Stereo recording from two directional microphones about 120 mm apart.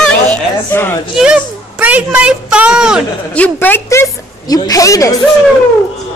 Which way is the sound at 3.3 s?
15° left (ahead or behind).